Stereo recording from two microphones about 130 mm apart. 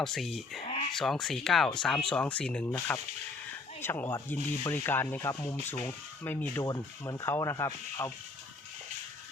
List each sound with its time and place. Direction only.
0.0 s speech: centre (ahead or behind)
2.6 s speech: 20° left (ahead or behind)
3.8 s rub: 15° left (ahead or behind)
5.8 s speech: 15° left (ahead or behind)